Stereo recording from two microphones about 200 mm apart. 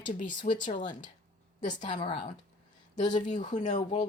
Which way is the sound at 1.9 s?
35° left (ahead or behind).